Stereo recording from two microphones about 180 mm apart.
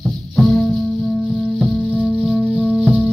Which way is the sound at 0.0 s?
Centre (ahead or behind).